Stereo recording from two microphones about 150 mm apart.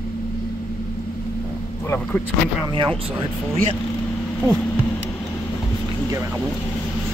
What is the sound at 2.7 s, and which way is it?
Speech, 35° right (ahead or behind).